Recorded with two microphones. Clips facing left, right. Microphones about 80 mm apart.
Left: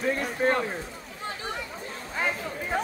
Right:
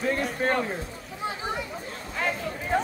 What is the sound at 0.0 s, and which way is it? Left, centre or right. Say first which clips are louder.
Speech: even; centre.